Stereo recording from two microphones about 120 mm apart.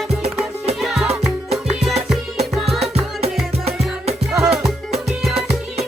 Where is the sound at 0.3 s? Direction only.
Centre (ahead or behind).